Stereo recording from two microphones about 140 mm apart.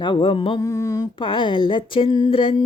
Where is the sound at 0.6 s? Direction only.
25° left (ahead or behind).